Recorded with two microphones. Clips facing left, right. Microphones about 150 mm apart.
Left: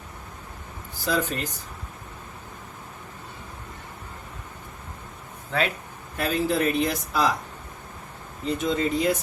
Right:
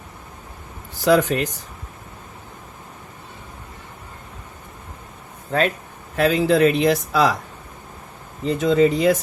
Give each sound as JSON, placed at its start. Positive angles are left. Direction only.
{"t": 1.0, "sound": "speech", "side_deg": -75}
{"t": 5.5, "sound": "speech", "side_deg": -45}
{"t": 6.1, "sound": "speech", "side_deg": -90}
{"t": 8.4, "sound": "speech", "side_deg": -90}